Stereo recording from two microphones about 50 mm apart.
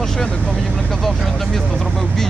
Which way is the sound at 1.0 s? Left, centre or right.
Centre.